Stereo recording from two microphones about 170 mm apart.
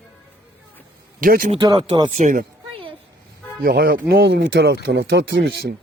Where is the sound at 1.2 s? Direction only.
55° right (ahead or behind).